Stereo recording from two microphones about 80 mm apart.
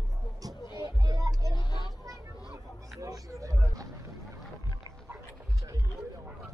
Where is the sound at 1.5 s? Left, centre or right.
Left.